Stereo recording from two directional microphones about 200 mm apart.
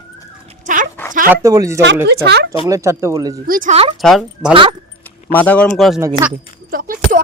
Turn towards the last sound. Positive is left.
turn(degrees=-45)  # may be behind; listen again after turning